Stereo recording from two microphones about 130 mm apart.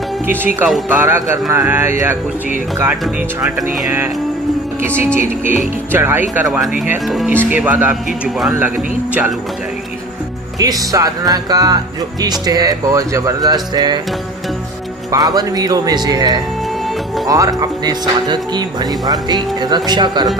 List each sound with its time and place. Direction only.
0.3 s speech: 15° right (ahead or behind)
5.9 s speech: 15° right (ahead or behind)
7.3 s speech: 10° right (ahead or behind)
10.6 s speech: 25° right (ahead or behind)
15.1 s speech: 30° right (ahead or behind)